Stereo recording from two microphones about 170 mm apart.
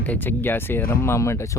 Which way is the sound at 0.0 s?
10° left (ahead or behind).